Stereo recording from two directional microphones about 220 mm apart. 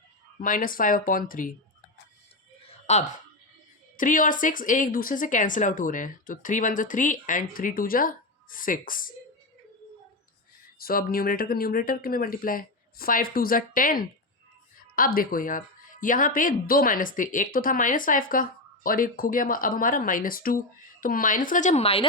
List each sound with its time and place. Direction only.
0.4 s speech: 40° left (ahead or behind)
2.6 s a sound: 30° left (ahead or behind)
3.9 s speech: 35° left (ahead or behind)
10.8 s speech: 40° left (ahead or behind)